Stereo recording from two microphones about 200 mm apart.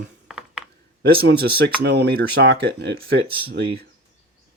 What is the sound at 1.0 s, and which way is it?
Speech, 50° right (ahead or behind).